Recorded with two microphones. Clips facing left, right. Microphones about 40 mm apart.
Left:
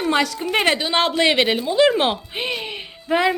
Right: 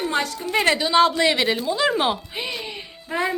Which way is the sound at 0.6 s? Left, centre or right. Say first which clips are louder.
Right 4 dB; left.